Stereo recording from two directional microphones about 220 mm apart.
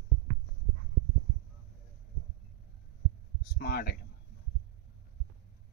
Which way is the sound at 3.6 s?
45° left (ahead or behind).